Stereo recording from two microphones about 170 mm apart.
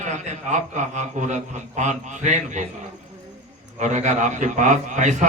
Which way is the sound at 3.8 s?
45° right (ahead or behind).